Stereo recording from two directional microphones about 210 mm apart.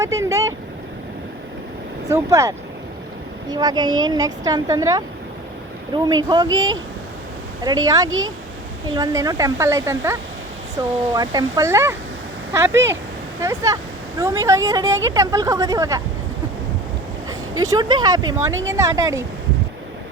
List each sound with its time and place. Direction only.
0.0 s speech: 15° right (ahead or behind)
2.0 s a woman's voice: 15° right (ahead or behind)
7.9 s speech: 15° right (ahead or behind)
17.6 s speech: 20° right (ahead or behind)